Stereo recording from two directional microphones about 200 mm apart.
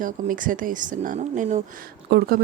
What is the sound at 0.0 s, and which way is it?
Speech, 40° right (ahead or behind).